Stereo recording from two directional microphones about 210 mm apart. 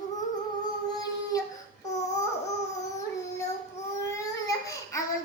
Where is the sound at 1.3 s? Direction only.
15° left (ahead or behind).